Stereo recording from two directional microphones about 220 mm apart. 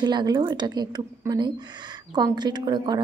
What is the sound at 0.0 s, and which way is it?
A woman's voice, 20° right (ahead or behind).